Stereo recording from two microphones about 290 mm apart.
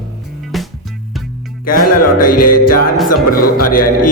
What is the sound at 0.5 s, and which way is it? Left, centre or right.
Music, centre.